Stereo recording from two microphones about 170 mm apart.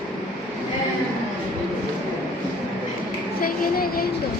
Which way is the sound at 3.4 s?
60° left (ahead or behind).